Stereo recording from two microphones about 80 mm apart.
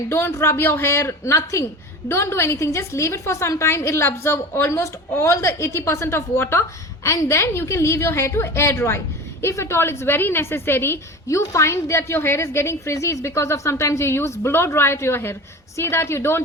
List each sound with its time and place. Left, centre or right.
0.1 s a woman's voice: left
11.3 s a woman's voice: left